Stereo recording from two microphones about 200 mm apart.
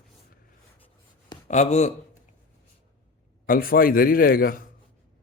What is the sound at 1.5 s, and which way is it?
Speech, 35° left (ahead or behind).